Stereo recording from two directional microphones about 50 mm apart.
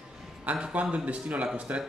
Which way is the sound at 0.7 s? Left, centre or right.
Right.